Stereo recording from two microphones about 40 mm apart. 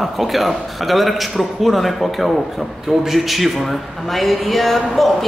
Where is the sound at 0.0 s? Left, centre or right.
Centre.